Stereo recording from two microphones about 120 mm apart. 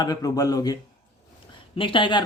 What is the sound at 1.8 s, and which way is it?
Speech, 45° left (ahead or behind).